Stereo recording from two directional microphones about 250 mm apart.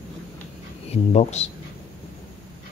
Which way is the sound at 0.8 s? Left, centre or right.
Left.